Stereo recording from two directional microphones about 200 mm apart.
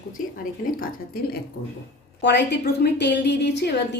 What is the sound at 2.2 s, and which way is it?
A woman's voice, 60° left (ahead or behind).